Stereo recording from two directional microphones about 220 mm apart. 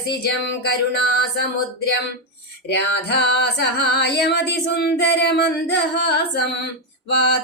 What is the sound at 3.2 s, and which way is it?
Female singing, 50° left (ahead or behind).